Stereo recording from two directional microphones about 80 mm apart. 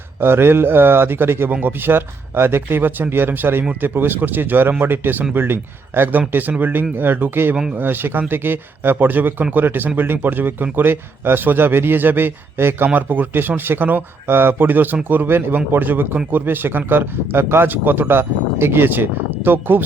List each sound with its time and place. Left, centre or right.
0.2 s speech: right